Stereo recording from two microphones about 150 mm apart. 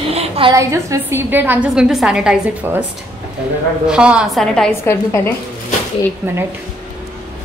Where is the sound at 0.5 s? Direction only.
20° right (ahead or behind).